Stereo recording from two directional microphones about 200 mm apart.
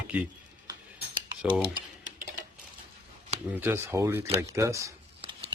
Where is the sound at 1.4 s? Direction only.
5° right (ahead or behind).